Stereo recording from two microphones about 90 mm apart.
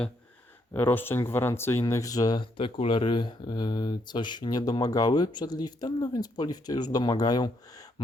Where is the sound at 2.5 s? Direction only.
75° left (ahead or behind).